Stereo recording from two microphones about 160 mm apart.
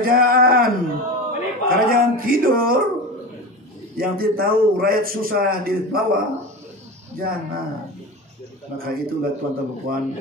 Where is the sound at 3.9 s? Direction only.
65° right (ahead or behind).